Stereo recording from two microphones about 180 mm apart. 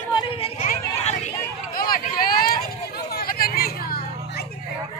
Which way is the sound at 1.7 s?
55° left (ahead or behind).